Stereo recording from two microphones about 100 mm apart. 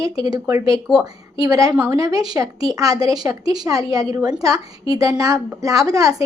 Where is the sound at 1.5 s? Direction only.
35° right (ahead or behind).